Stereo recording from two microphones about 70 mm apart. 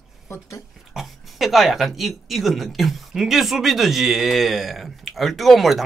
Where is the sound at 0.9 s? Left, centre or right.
Centre.